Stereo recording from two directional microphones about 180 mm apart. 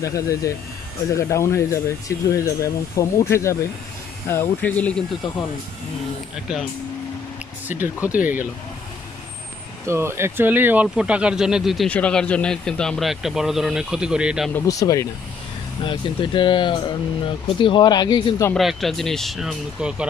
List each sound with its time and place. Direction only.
0.0 s speech: 15° left (ahead or behind)
7.6 s speech: 10° right (ahead or behind)
9.8 s speech: 15° right (ahead or behind)
14.5 s speech: 20° left (ahead or behind)
18.5 s speech: centre (ahead or behind)